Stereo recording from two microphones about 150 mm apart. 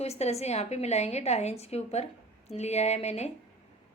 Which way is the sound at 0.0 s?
45° left (ahead or behind).